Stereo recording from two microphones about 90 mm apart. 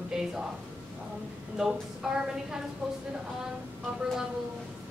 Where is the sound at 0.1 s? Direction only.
5° right (ahead or behind).